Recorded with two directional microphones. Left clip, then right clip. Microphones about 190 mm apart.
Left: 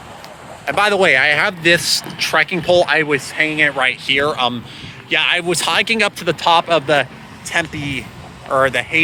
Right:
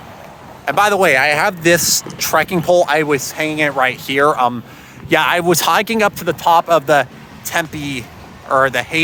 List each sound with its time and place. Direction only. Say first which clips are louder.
0.6 s speech: right 1 dB; 15° right (ahead or behind)
4.0 s speech: right 3 dB; 30° right (ahead or behind)
5.0 s speech: right 3 dB; 40° right (ahead or behind)
6.0 s speech: right 2 dB; 20° right (ahead or behind)
6.2 s speech: right 1 dB; 10° right (ahead or behind)